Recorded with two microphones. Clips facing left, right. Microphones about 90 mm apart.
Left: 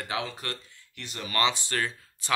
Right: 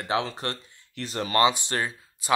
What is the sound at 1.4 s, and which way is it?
Speech, 20° right (ahead or behind).